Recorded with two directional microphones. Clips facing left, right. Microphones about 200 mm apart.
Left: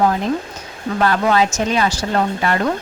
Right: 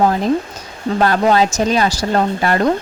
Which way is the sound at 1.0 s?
35° right (ahead or behind).